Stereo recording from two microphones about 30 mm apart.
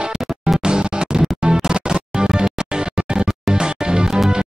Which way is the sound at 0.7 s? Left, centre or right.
Right.